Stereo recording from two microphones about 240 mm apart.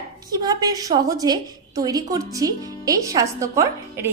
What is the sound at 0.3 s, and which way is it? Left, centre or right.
A woman's voice, centre.